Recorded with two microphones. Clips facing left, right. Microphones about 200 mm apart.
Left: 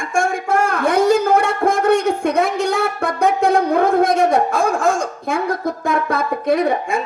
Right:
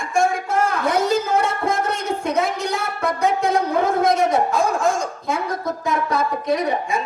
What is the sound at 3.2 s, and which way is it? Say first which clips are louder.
Wind instrument: left 5 dB; 55° left (ahead or behind).